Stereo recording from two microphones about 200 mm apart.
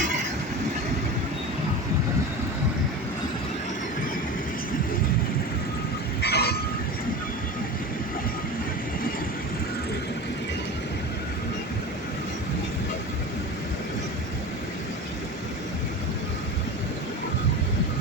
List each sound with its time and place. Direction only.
6.2 s vehicle: 55° left (ahead or behind)